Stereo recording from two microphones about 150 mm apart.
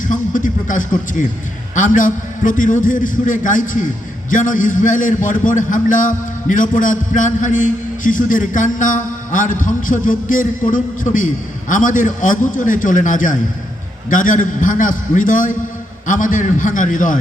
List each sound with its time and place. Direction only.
0.0 s a man's voice: 60° left (ahead or behind)